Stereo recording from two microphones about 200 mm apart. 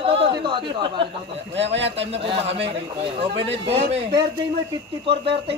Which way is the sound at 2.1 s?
30° right (ahead or behind).